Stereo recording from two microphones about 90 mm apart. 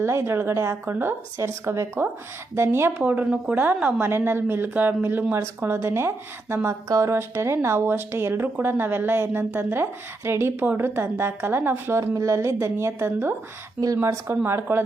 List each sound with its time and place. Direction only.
0.0 s speech: 30° right (ahead or behind)
3.0 s speech: 15° right (ahead or behind)
4.1 s speech: 25° right (ahead or behind)
11.9 s a woman's voice: 35° right (ahead or behind)
13.8 s a woman's voice: 35° right (ahead or behind)